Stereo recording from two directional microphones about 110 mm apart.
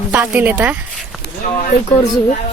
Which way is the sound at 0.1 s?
15° right (ahead or behind).